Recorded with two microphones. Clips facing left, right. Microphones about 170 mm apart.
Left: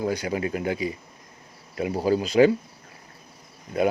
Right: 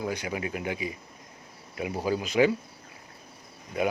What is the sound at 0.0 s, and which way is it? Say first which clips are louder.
Speech: left 5 dB; 35° left (ahead or behind).